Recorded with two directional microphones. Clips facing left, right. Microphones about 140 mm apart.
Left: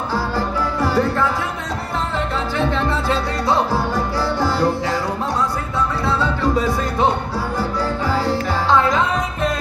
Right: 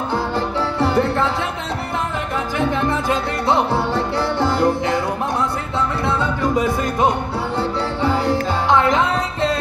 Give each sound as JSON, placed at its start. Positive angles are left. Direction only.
{"t": 0.1, "sound": "music", "side_deg": -25}
{"t": 2.5, "sound": "music", "side_deg": -15}
{"t": 6.1, "sound": "music", "side_deg": -20}